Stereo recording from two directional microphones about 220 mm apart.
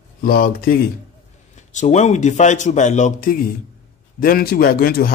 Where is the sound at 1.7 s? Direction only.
35° left (ahead or behind).